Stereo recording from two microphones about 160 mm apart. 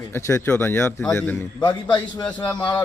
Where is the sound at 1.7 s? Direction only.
25° left (ahead or behind).